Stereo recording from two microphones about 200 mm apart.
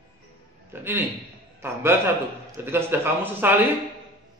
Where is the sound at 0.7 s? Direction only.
10° right (ahead or behind).